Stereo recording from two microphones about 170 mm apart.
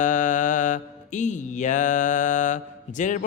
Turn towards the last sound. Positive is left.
turn(degrees=50)  # may be behind; listen again after turning